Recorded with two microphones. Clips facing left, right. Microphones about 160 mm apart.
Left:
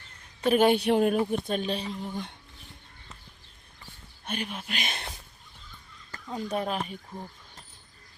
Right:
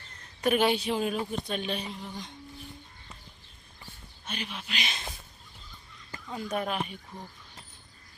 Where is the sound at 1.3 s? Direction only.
45° left (ahead or behind).